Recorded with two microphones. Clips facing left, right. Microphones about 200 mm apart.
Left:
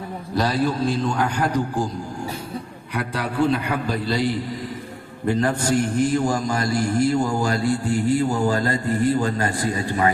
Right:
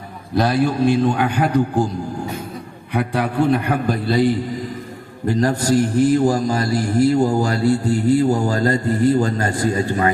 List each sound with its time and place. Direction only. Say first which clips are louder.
0.3 s a man's voice: right 4 dB; 50° right (ahead or behind)
2.9 s a man's voice: right 6 dB; 60° right (ahead or behind)
5.3 s a man's voice: right 3 dB; 40° right (ahead or behind)